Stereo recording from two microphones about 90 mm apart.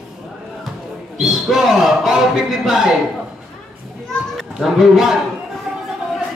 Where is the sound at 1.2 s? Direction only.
Centre (ahead or behind).